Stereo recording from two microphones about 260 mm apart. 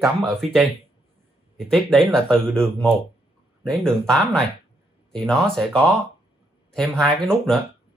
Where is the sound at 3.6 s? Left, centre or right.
Centre.